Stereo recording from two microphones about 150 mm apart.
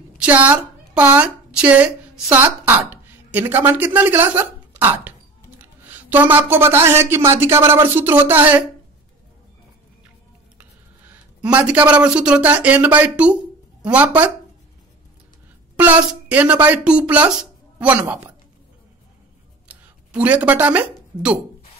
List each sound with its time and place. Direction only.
0.2 s a woman's voice: 10° right (ahead or behind)
5.6 s a sound: 10° right (ahead or behind)
6.3 s speech: 15° right (ahead or behind)
10.6 s speech: 10° right (ahead or behind)
15.7 s speech: 10° right (ahead or behind)
19.7 s speech: 10° right (ahead or behind)